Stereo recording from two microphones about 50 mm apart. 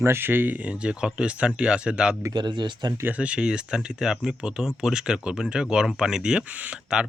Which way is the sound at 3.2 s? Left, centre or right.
Right.